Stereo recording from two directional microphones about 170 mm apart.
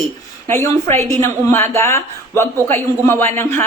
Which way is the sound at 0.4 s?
15° left (ahead or behind).